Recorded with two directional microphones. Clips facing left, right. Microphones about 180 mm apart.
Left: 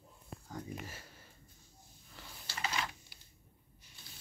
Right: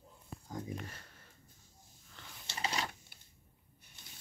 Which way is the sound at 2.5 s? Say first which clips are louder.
Right 1 dB; 35° right (ahead or behind).